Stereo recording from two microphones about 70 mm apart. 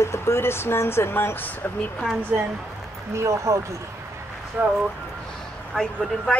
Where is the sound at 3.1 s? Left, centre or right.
Right.